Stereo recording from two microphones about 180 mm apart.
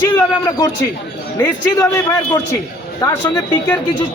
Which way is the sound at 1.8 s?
20° left (ahead or behind).